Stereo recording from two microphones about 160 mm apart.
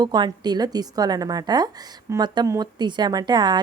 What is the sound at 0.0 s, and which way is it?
A woman's voice, 25° right (ahead or behind).